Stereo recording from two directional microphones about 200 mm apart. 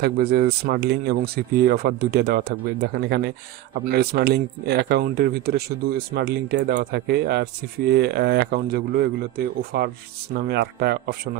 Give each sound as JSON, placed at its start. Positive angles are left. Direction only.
{"t": 0.0, "sound": "speech", "side_deg": -50}